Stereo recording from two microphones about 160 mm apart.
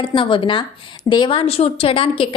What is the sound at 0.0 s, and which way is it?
A woman's voice, 30° left (ahead or behind).